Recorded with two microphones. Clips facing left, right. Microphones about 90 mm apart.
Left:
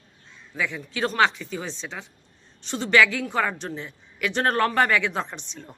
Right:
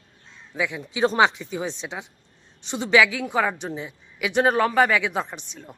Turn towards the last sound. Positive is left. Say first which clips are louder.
# right 1 dB
turn(degrees=-5)  # may be behind; listen again after turning